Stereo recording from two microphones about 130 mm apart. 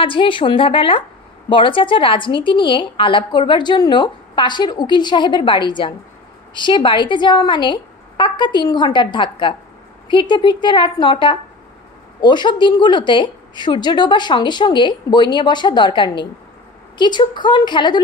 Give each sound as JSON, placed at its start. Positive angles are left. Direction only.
{"t": 0.0, "sound": "a woman's voice", "side_deg": 40}